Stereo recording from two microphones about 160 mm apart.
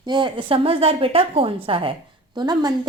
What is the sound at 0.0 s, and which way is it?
A woman's voice, 30° right (ahead or behind).